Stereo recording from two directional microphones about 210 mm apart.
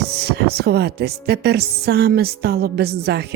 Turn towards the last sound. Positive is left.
turn(degrees=-50)  # may be behind; listen again after turning